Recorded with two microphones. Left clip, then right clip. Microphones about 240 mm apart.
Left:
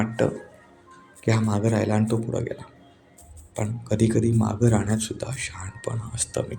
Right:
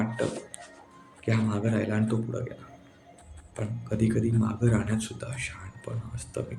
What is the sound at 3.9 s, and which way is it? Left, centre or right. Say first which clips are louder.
Speech: left 5 dB; left.